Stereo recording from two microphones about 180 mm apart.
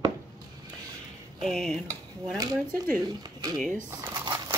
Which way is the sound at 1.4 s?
Centre (ahead or behind).